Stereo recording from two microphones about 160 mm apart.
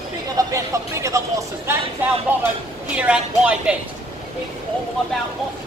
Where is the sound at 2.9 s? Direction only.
5° right (ahead or behind).